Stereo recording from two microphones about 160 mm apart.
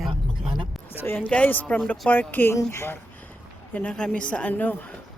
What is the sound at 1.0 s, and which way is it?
Speech, 10° left (ahead or behind).